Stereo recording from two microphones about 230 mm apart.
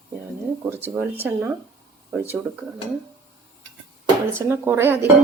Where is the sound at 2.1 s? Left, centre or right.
Centre.